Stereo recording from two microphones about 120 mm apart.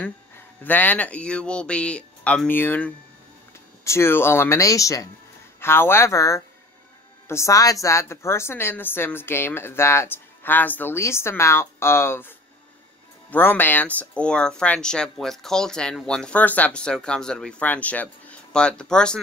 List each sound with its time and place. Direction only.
0.7 s a woman's voice: 15° left (ahead or behind)